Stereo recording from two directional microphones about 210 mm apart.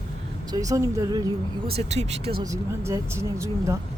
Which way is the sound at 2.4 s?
15° right (ahead or behind).